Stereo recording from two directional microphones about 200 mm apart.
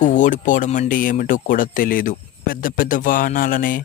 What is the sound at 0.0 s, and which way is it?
Speech, 40° left (ahead or behind).